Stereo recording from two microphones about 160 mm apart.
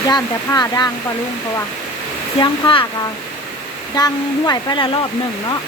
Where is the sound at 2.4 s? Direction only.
30° left (ahead or behind).